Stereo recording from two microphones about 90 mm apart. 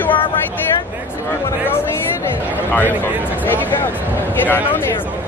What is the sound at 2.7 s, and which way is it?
Speech, 20° left (ahead or behind).